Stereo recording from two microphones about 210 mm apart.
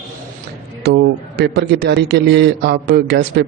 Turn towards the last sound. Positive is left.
turn(degrees=-50)  # may be behind; listen again after turning